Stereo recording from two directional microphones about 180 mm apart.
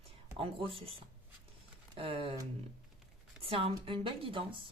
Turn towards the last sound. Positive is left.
turn(degrees=-30)  # may be behind; listen again after turning